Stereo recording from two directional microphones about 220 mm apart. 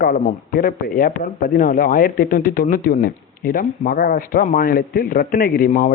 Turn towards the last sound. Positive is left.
turn(degrees=35)  # may be behind; listen again after turning